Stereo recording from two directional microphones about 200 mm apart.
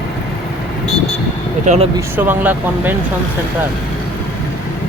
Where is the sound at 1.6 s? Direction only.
35° right (ahead or behind).